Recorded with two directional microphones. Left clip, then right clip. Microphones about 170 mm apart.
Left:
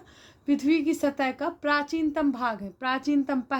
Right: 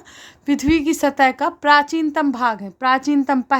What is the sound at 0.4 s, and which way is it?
A woman's voice, 50° right (ahead or behind).